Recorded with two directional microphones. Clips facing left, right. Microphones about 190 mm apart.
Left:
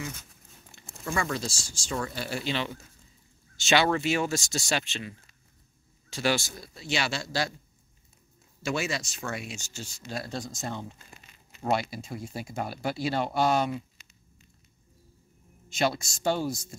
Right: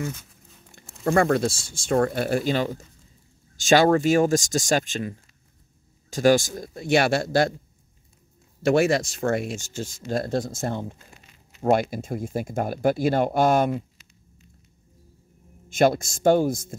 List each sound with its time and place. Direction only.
0.7 s speech: 50° right (ahead or behind)
8.6 s speech: 55° right (ahead or behind)
15.7 s speech: 50° right (ahead or behind)